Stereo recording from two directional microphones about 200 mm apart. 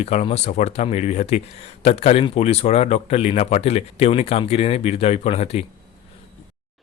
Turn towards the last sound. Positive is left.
turn(degrees=30)  # may be behind; listen again after turning